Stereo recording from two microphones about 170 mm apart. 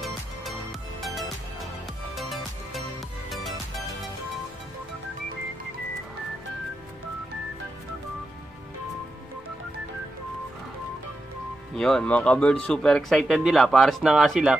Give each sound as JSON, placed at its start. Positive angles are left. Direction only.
{"t": 2.1, "sound": "music", "side_deg": 0}
{"t": 11.7, "sound": "speech", "side_deg": 5}